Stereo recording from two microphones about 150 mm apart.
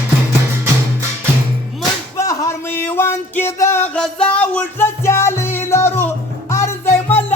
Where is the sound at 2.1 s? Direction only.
20° left (ahead or behind).